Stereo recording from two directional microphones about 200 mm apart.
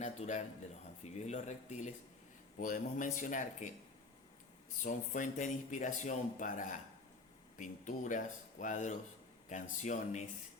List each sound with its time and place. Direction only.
0.0 s speech: 35° left (ahead or behind)
4.8 s speech: 40° left (ahead or behind)